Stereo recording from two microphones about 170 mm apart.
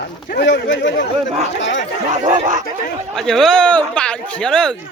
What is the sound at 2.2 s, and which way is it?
Speech, 50° right (ahead or behind).